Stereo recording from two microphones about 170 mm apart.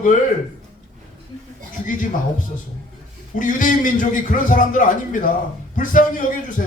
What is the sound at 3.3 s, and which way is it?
A man's voice, 50° left (ahead or behind).